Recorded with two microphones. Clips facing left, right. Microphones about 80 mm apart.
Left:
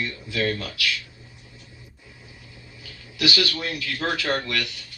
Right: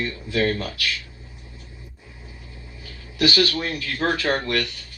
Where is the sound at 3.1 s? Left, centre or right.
Right.